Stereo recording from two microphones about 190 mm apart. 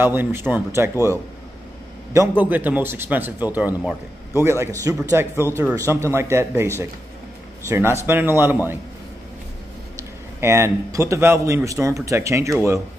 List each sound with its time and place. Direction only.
0.0 s speech: 10° right (ahead or behind)
10.4 s speech: 15° right (ahead or behind)